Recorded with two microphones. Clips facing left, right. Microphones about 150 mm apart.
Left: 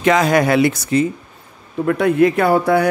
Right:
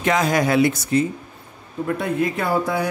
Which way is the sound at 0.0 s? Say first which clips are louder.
Left 5 dB; 80° left.